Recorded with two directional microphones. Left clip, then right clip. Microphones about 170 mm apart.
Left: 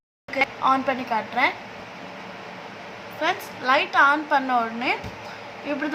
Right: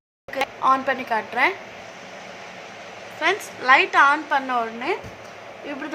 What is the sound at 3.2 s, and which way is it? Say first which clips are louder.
Speech: right 3 dB; 20° right (ahead or behind).